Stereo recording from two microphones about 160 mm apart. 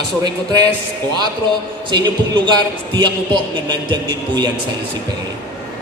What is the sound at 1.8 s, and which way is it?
Speech, 30° right (ahead or behind).